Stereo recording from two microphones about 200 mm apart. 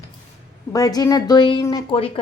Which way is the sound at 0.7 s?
20° left (ahead or behind).